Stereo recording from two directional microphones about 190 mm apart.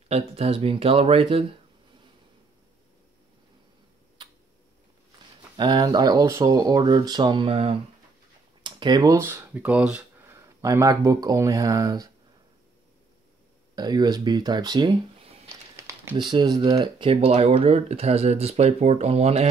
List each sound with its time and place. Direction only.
0.1 s speech: 30° right (ahead or behind)
5.6 s speech: 20° right (ahead or behind)
13.7 s speech: 20° right (ahead or behind)